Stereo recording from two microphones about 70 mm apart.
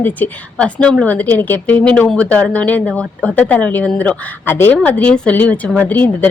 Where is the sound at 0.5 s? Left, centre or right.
Centre.